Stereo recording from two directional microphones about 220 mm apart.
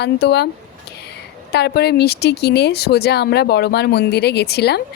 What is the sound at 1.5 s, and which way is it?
Speech, 50° left (ahead or behind).